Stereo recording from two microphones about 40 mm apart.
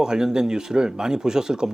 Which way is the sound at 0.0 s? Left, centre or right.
Centre.